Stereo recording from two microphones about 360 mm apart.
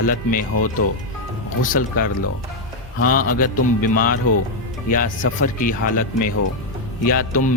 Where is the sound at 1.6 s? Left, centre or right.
Left.